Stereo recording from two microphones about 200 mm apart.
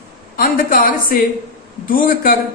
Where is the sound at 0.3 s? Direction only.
45° left (ahead or behind).